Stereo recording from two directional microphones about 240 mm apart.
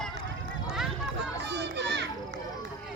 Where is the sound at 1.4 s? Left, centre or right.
Right.